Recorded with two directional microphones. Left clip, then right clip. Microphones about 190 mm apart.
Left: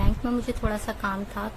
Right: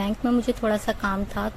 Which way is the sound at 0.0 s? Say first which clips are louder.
Right 5 dB; 25° right (ahead or behind).